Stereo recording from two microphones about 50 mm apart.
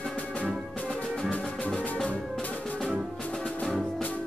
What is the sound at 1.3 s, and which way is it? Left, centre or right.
Music, left.